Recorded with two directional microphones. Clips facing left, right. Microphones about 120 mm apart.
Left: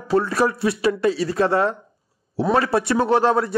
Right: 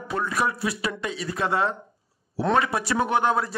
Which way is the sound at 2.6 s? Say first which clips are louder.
Left 7 dB; 30° left (ahead or behind).